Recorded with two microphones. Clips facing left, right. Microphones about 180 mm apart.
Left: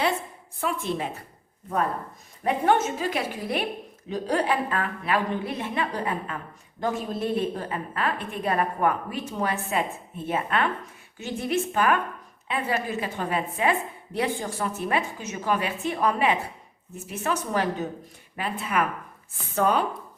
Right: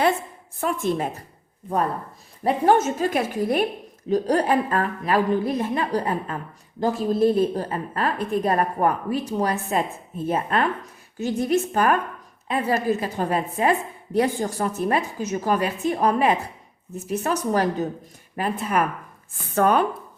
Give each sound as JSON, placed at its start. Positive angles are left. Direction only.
{"t": 0.6, "sound": "a woman's voice", "side_deg": -45}
{"t": 2.4, "sound": "a woman's voice", "side_deg": -35}
{"t": 19.5, "sound": "speech", "side_deg": -55}